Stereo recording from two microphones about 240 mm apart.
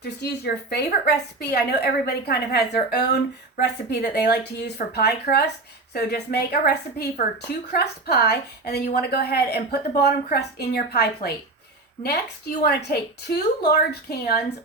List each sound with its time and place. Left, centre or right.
0.0 s a woman's voice: left